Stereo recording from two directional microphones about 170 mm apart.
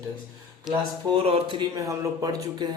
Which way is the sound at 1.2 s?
35° right (ahead or behind).